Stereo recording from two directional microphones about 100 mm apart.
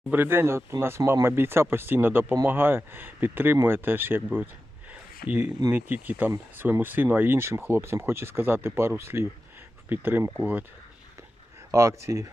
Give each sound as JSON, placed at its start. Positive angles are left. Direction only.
{"t": 0.1, "sound": "speech", "side_deg": -20}
{"t": 4.9, "sound": "a sound", "side_deg": -15}
{"t": 5.7, "sound": "speech", "side_deg": -20}
{"t": 11.7, "sound": "speech", "side_deg": -30}